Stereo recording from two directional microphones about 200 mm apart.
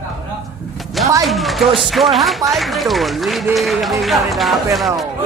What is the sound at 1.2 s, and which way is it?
Speech, centre (ahead or behind).